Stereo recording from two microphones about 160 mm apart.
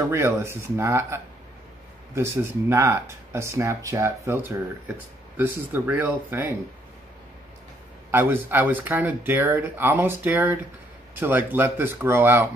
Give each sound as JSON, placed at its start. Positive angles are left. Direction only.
{"t": 0.1, "sound": "speech", "side_deg": -15}
{"t": 8.1, "sound": "speech", "side_deg": -15}